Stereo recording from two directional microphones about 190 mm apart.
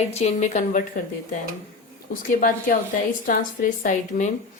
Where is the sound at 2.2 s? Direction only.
50° left (ahead or behind).